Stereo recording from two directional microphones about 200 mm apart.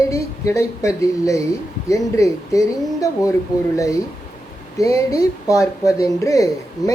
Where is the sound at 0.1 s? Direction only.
15° left (ahead or behind).